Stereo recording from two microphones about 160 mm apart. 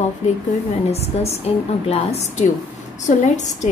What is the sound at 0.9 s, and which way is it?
A woman's voice, 40° left (ahead or behind).